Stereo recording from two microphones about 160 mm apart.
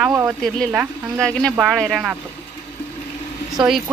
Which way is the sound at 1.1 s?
5° left (ahead or behind).